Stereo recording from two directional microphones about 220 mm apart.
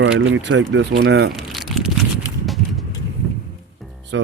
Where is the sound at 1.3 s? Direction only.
Centre (ahead or behind).